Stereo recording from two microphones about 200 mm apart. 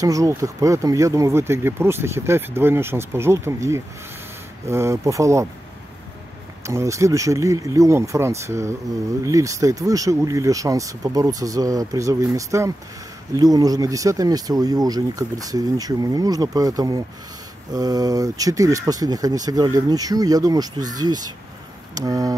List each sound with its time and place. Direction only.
0.0 s speech: 15° right (ahead or behind)
6.6 s speech: 15° right (ahead or behind)